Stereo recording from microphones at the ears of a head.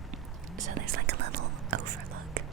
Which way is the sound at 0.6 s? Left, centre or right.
Right.